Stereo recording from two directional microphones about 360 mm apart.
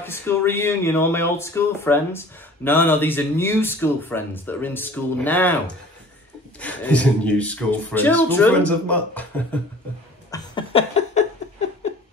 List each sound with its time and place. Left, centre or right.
0.0 s speech: centre
6.6 s speech: centre
10.3 s a sound: centre